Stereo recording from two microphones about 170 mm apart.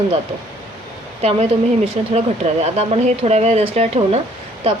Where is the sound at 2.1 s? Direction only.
40° right (ahead or behind).